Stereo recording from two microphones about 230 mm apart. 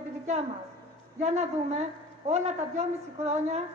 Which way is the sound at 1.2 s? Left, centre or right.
Right.